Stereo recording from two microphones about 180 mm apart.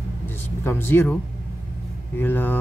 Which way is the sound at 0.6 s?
10° left (ahead or behind).